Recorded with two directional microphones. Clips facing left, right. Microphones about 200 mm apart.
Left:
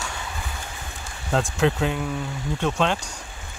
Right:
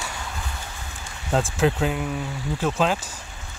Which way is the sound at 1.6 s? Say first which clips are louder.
Even; centre (ahead or behind).